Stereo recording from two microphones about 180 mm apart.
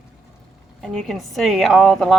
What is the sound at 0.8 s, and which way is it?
Speech, centre (ahead or behind).